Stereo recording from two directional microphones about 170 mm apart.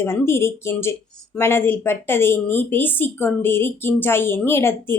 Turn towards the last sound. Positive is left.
turn(degrees=15)  # may be behind; listen again after turning